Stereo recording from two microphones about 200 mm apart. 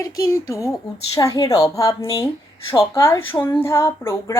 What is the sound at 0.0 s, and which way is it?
Speech, 15° left (ahead or behind).